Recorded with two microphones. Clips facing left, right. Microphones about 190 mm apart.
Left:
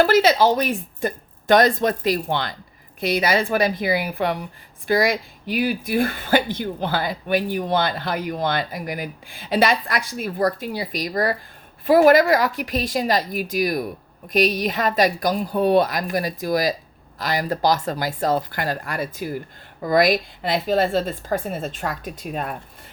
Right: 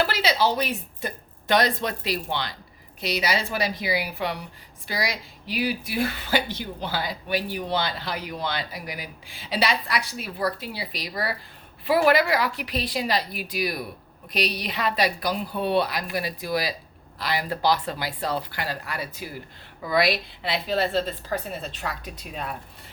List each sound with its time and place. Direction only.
0.0 s speech: 50° left (ahead or behind)